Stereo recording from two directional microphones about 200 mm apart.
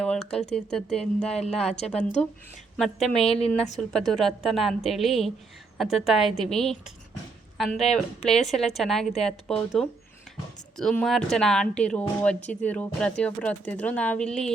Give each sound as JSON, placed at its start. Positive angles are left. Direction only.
{"t": 0.0, "sound": "speech", "side_deg": 5}
{"t": 2.0, "sound": "speech", "side_deg": 35}
{"t": 2.7, "sound": "speech", "side_deg": 0}